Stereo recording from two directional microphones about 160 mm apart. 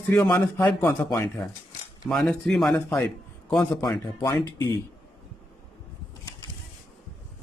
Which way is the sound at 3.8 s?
20° left (ahead or behind).